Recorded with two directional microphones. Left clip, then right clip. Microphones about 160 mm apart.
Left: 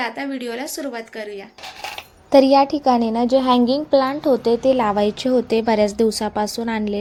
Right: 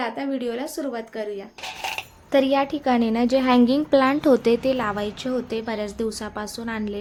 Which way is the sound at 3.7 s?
35° right (ahead or behind).